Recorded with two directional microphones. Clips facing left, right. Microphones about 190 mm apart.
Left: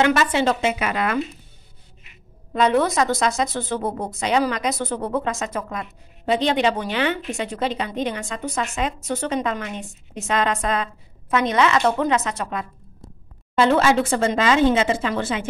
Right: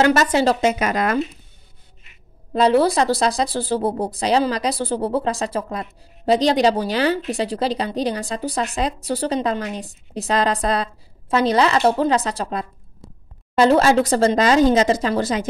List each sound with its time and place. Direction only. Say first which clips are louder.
0.0 s speech: right 3 dB; 40° right (ahead or behind)
2.5 s speech: right 3 dB; 35° right (ahead or behind)